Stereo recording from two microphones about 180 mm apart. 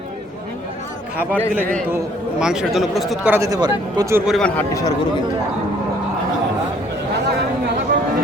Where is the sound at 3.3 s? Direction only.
20° right (ahead or behind).